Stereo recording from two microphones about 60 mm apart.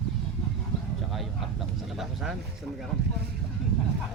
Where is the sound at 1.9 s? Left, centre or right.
Centre.